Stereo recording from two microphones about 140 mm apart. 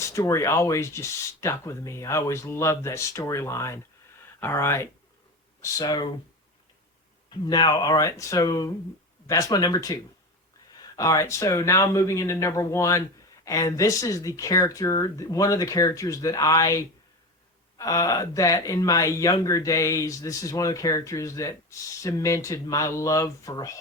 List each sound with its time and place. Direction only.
0.0 s speech: 20° left (ahead or behind)
7.3 s speech: 30° left (ahead or behind)